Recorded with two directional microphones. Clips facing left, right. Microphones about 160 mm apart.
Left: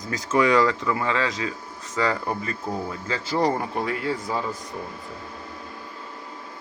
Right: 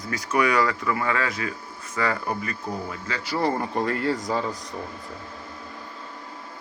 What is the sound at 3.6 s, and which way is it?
Speech, 5° left (ahead or behind).